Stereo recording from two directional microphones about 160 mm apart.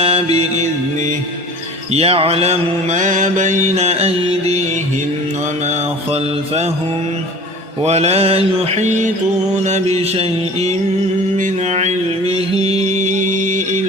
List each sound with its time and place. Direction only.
0.0 s mantra: 40° right (ahead or behind)
1.9 s mantra: 40° right (ahead or behind)
5.6 s mantra: 40° right (ahead or behind)
7.9 s mantra: 40° right (ahead or behind)
13.1 s music: 50° right (ahead or behind)